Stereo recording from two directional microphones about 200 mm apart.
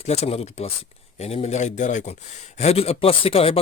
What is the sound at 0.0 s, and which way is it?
Speech, 30° left (ahead or behind).